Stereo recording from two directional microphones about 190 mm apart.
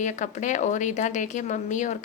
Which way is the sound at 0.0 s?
40° left (ahead or behind).